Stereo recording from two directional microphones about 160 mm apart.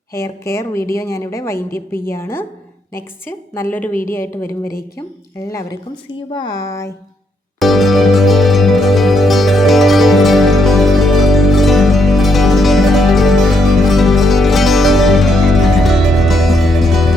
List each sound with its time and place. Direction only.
0.1 s a woman's voice: 15° left (ahead or behind)
7.6 s music: centre (ahead or behind)